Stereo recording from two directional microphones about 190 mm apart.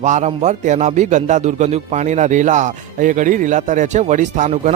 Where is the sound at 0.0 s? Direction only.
40° right (ahead or behind).